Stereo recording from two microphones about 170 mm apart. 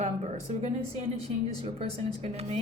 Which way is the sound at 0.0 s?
40° right (ahead or behind).